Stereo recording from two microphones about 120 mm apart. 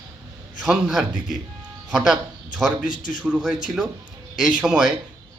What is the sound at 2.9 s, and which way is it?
Speech, 90° left.